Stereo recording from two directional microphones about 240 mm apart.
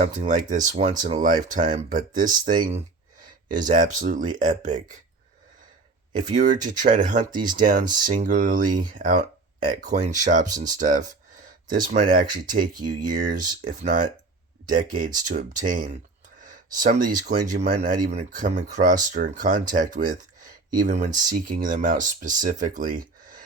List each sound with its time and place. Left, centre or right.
0.0 s speech: right
6.1 s speech: right